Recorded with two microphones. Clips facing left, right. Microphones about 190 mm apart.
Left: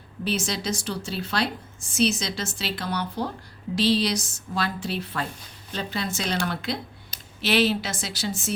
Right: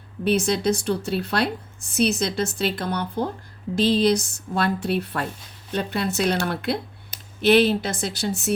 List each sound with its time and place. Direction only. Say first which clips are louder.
0.3 s a woman's voice: right 7 dB; 55° right (ahead or behind)